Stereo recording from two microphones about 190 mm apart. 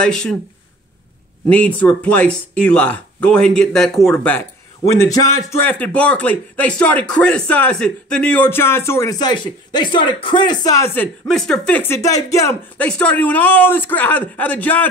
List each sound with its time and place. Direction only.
0.0 s speech: 5° left (ahead or behind)
1.5 s speech: 5° left (ahead or behind)
11.2 s speech: 5° left (ahead or behind)